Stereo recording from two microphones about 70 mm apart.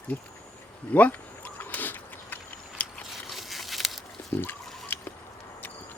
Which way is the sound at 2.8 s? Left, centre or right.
Left.